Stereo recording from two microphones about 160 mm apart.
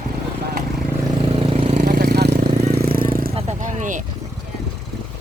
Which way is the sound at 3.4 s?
50° right (ahead or behind).